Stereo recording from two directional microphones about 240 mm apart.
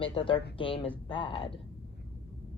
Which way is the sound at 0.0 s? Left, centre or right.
Left.